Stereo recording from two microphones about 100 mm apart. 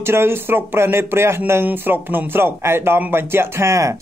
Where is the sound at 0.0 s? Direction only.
25° right (ahead or behind).